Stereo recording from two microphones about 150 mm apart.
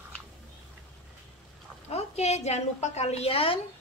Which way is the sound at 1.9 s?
45° left (ahead or behind).